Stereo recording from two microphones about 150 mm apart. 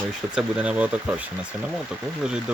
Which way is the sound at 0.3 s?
5° right (ahead or behind).